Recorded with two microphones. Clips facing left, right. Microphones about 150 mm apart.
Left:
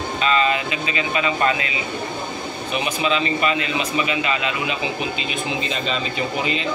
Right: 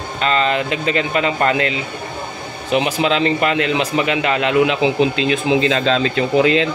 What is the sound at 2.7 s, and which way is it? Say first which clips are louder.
A man's voice: right 6 dB; 75° right (ahead or behind).